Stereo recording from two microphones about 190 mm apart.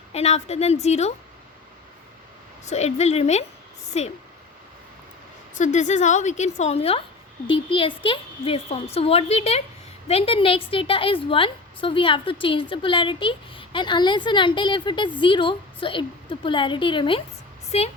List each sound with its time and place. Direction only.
0.1 s a woman's voice: 35° left (ahead or behind)
2.6 s a woman's voice: 35° left (ahead or behind)
5.5 s a woman's voice: 40° left (ahead or behind)